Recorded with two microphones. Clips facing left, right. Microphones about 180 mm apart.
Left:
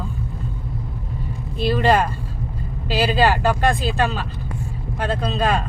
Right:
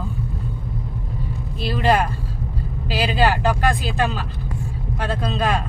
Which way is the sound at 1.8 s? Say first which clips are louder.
Right 1 dB; 10° right (ahead or behind).